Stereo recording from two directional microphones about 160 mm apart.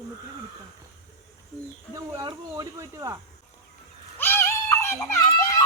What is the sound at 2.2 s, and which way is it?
Speech, 20° right (ahead or behind).